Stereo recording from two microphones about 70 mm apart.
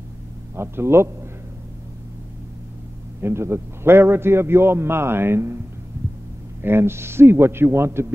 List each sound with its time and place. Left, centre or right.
0.6 s a man's voice: right
3.2 s a man's voice: right
6.6 s a man's voice: right